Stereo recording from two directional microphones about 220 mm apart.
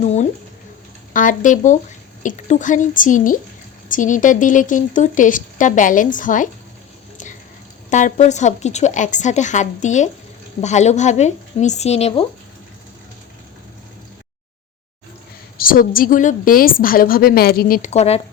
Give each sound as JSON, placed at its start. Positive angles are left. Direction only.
{"t": 0.0, "sound": "a sound", "side_deg": 30}
{"t": 1.1, "sound": "speech", "side_deg": 35}
{"t": 7.9, "sound": "speech", "side_deg": 35}
{"t": 15.5, "sound": "speech", "side_deg": 40}